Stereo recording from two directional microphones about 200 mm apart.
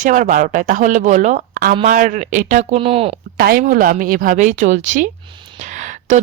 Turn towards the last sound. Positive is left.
turn(degrees=-35)  # may be behind; listen again after turning